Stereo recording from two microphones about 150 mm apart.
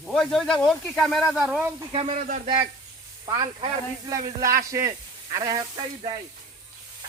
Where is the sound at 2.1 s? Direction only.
60° right (ahead or behind).